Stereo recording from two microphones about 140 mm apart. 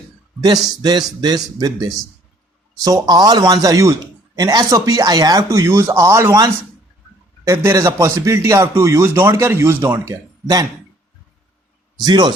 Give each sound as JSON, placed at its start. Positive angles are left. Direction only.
{"t": 0.4, "sound": "a man's voice", "side_deg": -30}
{"t": 12.0, "sound": "a man's voice", "side_deg": -30}